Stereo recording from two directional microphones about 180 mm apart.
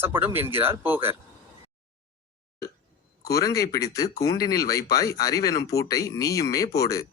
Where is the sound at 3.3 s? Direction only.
20° left (ahead or behind).